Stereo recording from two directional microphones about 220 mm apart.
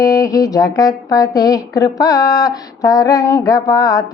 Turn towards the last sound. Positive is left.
turn(degrees=15)  # may be behind; listen again after turning